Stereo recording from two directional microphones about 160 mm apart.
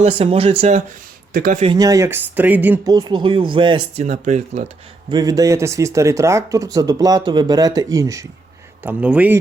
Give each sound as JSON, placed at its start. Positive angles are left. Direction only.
{"t": 0.0, "sound": "speech", "side_deg": -35}
{"t": 1.3, "sound": "speech", "side_deg": -55}
{"t": 1.6, "sound": "speech", "side_deg": -25}
{"t": 2.8, "sound": "speech", "side_deg": -25}
{"t": 4.0, "sound": "speech", "side_deg": -45}
{"t": 5.1, "sound": "speech", "side_deg": -25}
{"t": 8.8, "sound": "speech", "side_deg": -10}